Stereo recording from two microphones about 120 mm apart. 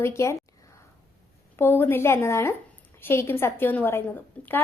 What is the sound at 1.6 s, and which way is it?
A woman's voice, 15° left (ahead or behind).